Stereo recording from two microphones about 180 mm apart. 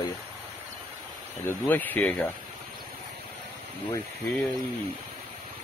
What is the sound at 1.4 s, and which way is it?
Speech, 10° left (ahead or behind).